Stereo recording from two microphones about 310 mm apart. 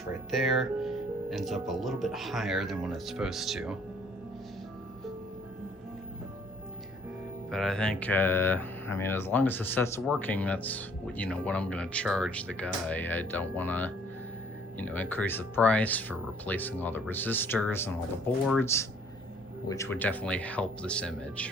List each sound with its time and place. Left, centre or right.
0.3 s speech: centre
7.5 s speech: centre